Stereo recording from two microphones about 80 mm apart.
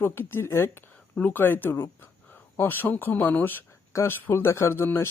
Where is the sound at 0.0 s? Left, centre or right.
Left.